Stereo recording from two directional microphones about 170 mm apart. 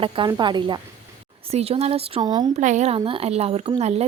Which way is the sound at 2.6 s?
45° right (ahead or behind).